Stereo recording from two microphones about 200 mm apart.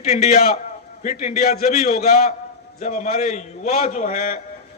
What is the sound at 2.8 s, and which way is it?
A man's voice, 35° left (ahead or behind).